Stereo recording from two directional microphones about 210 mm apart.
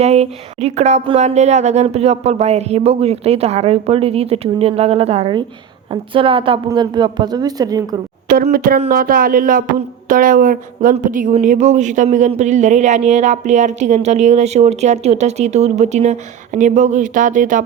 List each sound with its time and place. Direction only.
0.0 s speech: 30° right (ahead or behind)
8.3 s speech: 45° right (ahead or behind)